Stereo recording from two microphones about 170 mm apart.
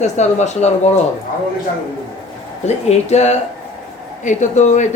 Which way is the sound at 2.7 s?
40° left (ahead or behind).